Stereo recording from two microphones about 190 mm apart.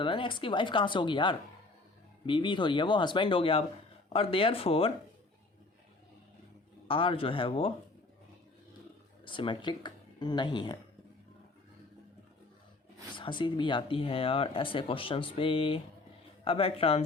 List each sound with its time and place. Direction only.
0.0 s speech: 25° left (ahead or behind)
6.8 s speech: 30° left (ahead or behind)
9.2 s speech: 25° left (ahead or behind)
13.1 s speech: 25° left (ahead or behind)